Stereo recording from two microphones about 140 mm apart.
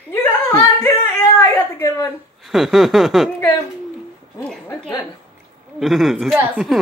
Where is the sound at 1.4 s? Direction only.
25° left (ahead or behind).